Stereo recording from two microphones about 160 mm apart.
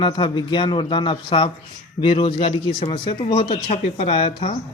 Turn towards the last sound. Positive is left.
turn(degrees=40)  # may be behind; listen again after turning